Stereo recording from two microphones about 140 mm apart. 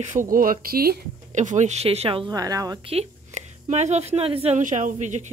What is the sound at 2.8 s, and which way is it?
A woman's voice, 45° right (ahead or behind).